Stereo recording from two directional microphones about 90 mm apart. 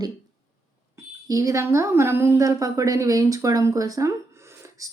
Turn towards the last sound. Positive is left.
turn(degrees=-35)  # may be behind; listen again after turning